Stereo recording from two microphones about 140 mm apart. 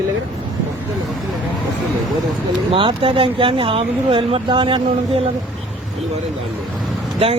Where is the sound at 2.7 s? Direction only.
40° right (ahead or behind).